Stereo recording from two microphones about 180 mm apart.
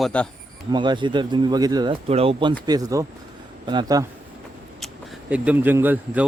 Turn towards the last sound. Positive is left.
turn(degrees=-10)  # may be behind; listen again after turning